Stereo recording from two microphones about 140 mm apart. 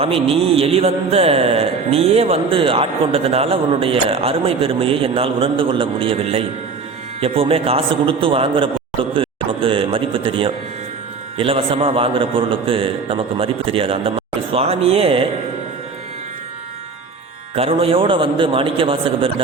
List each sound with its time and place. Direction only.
0.0 s speech: 45° right (ahead or behind)
9.1 s a sound: 40° right (ahead or behind)
11.3 s a man's voice: 40° right (ahead or behind)
17.5 s a man's voice: 45° right (ahead or behind)